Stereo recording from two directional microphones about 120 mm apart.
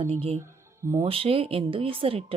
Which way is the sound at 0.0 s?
55° right (ahead or behind).